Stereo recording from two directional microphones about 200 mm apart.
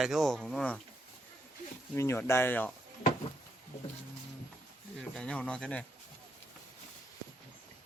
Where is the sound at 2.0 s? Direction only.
15° left (ahead or behind).